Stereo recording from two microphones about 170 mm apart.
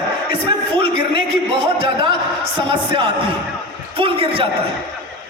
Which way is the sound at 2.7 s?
30° right (ahead or behind).